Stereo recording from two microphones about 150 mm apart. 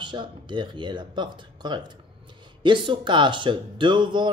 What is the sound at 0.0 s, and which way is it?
Speech, 30° right (ahead or behind).